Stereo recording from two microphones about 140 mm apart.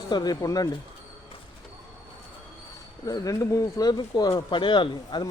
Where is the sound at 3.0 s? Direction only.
25° left (ahead or behind).